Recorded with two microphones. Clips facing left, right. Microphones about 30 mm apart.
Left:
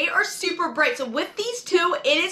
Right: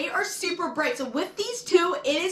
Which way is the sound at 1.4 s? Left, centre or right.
Left.